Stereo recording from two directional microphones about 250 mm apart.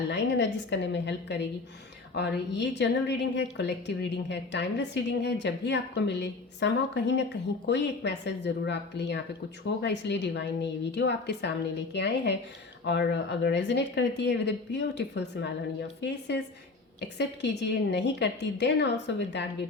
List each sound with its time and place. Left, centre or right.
0.1 s a woman's voice: left